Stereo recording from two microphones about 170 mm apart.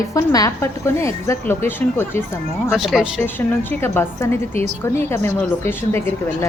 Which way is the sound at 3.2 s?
10° left (ahead or behind).